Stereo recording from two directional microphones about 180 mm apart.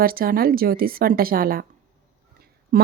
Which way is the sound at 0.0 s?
55° right (ahead or behind).